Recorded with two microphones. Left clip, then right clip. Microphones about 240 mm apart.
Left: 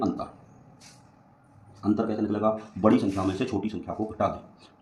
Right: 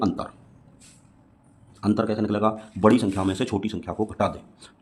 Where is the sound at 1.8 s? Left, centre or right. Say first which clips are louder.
Right 3 dB; right.